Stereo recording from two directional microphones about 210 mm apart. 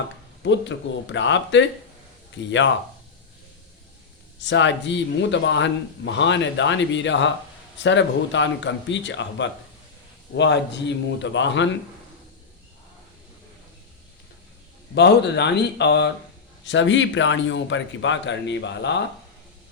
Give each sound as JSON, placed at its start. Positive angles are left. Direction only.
{"t": 0.4, "sound": "speech", "side_deg": 60}
{"t": 4.4, "sound": "speech", "side_deg": 60}
{"t": 14.9, "sound": "speech", "side_deg": 55}